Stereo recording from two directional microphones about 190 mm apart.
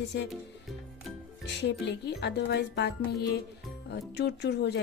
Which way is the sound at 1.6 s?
65° left (ahead or behind).